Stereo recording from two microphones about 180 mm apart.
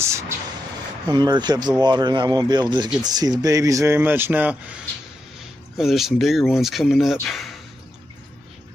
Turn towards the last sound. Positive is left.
turn(degrees=0)  # may be behind; listen again after turning